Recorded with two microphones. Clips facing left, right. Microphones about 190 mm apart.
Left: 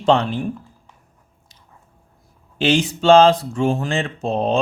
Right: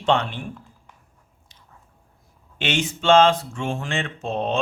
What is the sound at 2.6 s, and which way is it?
Speech, 35° left (ahead or behind).